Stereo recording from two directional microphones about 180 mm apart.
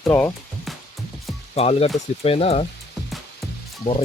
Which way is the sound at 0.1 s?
15° left (ahead or behind).